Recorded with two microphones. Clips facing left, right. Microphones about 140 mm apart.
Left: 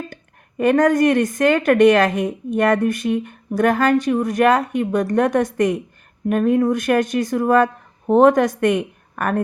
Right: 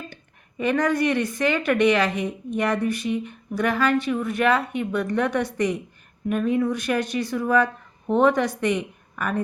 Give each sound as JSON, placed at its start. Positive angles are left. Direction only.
{"t": 0.1, "sound": "a woman's voice", "side_deg": 50}